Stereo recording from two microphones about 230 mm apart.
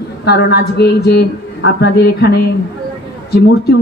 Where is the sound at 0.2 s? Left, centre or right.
Left.